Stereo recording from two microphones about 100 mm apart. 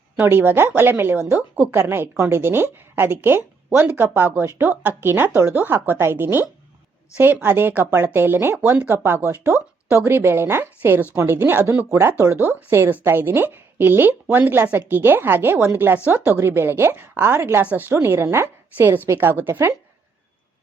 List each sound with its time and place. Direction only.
0.2 s speech: 20° right (ahead or behind)
1.7 s speech: 25° right (ahead or behind)